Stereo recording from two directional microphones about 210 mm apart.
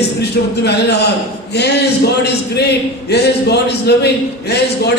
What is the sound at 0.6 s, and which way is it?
A man's voice, 50° left (ahead or behind).